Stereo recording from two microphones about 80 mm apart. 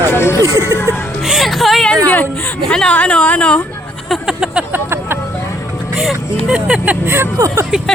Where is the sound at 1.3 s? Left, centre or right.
Centre.